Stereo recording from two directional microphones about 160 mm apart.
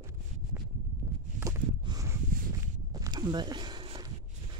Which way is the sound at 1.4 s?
55° right (ahead or behind).